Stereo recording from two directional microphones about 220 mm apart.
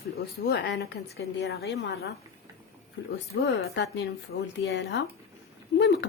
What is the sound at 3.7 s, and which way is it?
A woman's voice, 55° left (ahead or behind).